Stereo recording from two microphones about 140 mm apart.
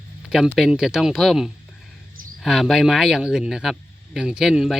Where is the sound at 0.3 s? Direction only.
5° right (ahead or behind).